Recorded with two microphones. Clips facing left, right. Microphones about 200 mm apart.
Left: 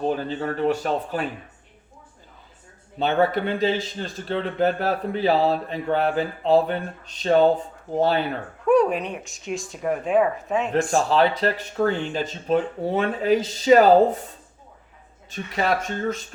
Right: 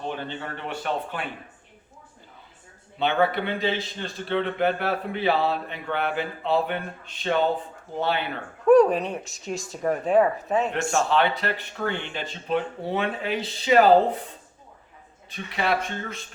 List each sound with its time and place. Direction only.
0.0 s a man's voice: 40° left (ahead or behind)
3.0 s a man's voice: 40° left (ahead or behind)
8.6 s a sound: centre (ahead or behind)
9.0 s speech: centre (ahead or behind)
10.7 s a man's voice: 35° left (ahead or behind)
15.3 s a man's voice: 40° left (ahead or behind)